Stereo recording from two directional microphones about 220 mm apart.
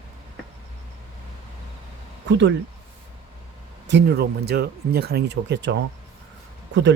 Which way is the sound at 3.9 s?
50° right (ahead or behind).